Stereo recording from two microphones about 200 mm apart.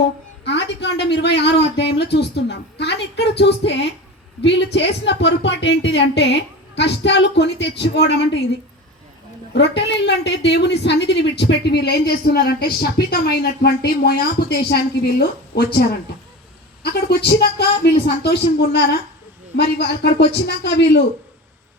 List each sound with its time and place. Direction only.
0.4 s a woman's voice: 60° left (ahead or behind)
9.5 s a woman's voice: 60° left (ahead or behind)